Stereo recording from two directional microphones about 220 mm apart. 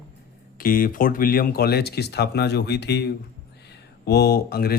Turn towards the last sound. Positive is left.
turn(degrees=45)  # may be behind; listen again after turning